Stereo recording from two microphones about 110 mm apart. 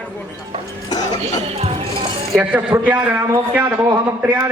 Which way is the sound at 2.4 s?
15° right (ahead or behind).